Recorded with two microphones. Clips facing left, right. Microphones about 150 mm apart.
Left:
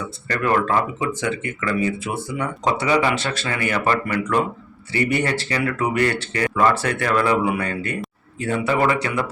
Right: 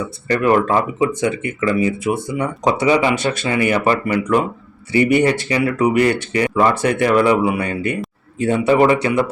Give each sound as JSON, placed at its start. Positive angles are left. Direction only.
{"t": 0.3, "sound": "speech", "side_deg": -20}